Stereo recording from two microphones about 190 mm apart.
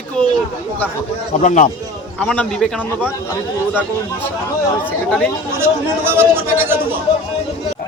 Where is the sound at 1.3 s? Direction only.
40° left (ahead or behind).